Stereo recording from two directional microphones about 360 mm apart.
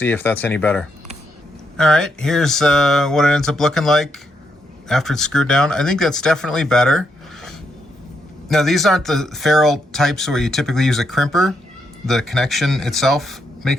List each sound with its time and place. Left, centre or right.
0.0 s speech: centre
8.4 s speech: centre